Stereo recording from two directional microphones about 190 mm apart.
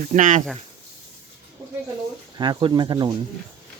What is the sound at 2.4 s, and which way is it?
Speech, 25° right (ahead or behind).